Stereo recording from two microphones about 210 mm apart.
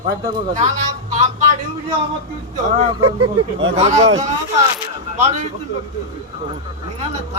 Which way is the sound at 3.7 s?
30° right (ahead or behind).